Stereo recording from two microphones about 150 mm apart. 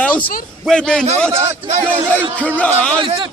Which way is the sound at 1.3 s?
50° right (ahead or behind).